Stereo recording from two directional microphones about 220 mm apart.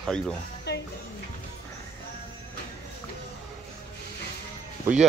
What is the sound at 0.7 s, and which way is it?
Music, 50° left (ahead or behind).